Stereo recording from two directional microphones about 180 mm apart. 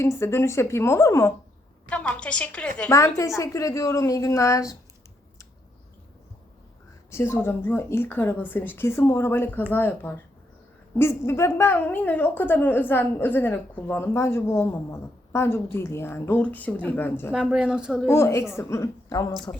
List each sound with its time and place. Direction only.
0.0 s a woman's voice: 15° left (ahead or behind)
7.1 s a woman's voice: 15° left (ahead or behind)
17.3 s a woman's voice: 5° right (ahead or behind)
18.1 s a woman's voice: 15° left (ahead or behind)